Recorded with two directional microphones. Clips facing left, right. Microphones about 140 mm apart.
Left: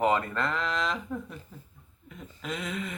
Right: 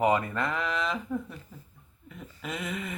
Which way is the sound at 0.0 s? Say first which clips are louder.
Right 1 dB; 15° right (ahead or behind).